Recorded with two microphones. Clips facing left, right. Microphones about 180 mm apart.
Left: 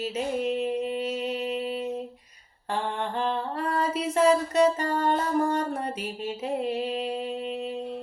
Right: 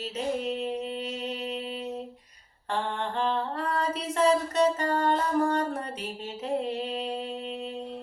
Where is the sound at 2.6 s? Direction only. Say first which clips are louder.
Left 1 dB; 5° left (ahead or behind).